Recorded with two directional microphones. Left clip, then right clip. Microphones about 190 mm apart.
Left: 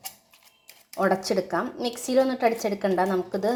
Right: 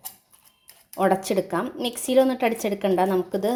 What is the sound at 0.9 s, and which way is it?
A woman's voice, 25° right (ahead or behind).